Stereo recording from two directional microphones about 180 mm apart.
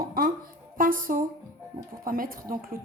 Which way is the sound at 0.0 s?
55° right (ahead or behind).